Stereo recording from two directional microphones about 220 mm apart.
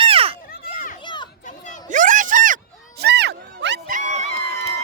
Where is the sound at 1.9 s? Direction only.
35° right (ahead or behind).